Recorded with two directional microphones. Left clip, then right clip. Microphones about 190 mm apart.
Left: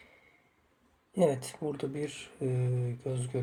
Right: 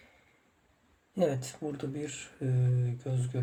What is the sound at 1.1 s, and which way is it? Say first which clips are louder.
Speech: left 2 dB; 5° left (ahead or behind).